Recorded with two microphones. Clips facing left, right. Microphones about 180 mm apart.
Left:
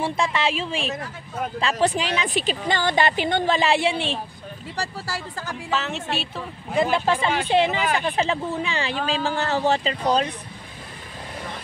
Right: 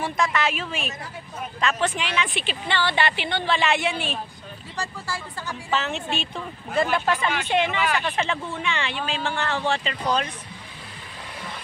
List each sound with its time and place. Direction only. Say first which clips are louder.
0.0 s a woman's voice: left 1 dB; 30° left (ahead or behind)
4.7 s speech: left 1 dB; 40° left (ahead or behind)
5.7 s speech: even; centre (ahead or behind)
6.7 s speech: left 2 dB; 15° left (ahead or behind)
7.1 s speech: left 3 dB; 30° left (ahead or behind)